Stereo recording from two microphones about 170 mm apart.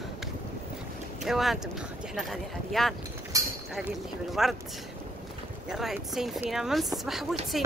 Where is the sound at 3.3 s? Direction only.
20° right (ahead or behind).